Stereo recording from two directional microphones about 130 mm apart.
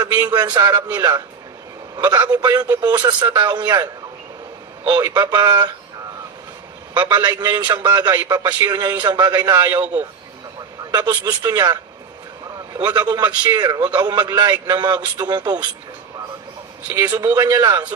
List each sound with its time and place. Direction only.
0.0 s a man's voice: 35° right (ahead or behind)
6.9 s a man's voice: 35° right (ahead or behind)
16.9 s a man's voice: 30° right (ahead or behind)